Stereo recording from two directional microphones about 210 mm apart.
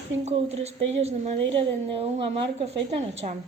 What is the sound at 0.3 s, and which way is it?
Speech, 30° right (ahead or behind).